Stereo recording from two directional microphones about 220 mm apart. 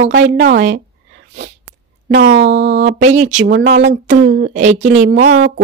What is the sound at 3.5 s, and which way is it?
Speech, 55° right (ahead or behind).